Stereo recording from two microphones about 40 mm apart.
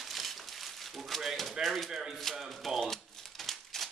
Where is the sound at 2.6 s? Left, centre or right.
Centre.